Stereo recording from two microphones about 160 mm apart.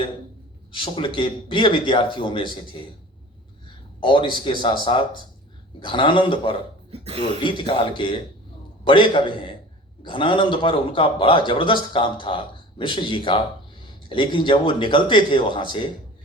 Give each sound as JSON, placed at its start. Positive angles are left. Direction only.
{"t": 0.7, "sound": "a man's voice", "side_deg": 30}
{"t": 3.7, "sound": "a sound", "side_deg": 35}
{"t": 4.6, "sound": "a man's voice", "side_deg": 30}
{"t": 7.0, "sound": "speech", "side_deg": -40}
{"t": 7.4, "sound": "a man's voice", "side_deg": 30}